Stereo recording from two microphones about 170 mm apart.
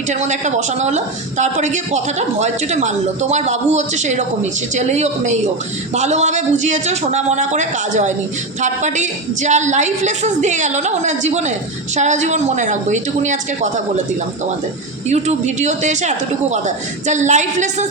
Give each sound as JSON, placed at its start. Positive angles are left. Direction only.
{"t": 0.1, "sound": "a woman's voice", "side_deg": -45}
{"t": 15.1, "sound": "a woman's voice", "side_deg": -40}